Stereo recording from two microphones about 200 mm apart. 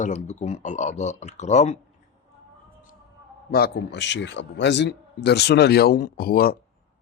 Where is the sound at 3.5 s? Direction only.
55° left (ahead or behind).